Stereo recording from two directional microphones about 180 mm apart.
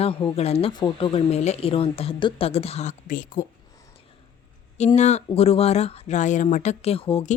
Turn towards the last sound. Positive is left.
turn(degrees=35)  # may be behind; listen again after turning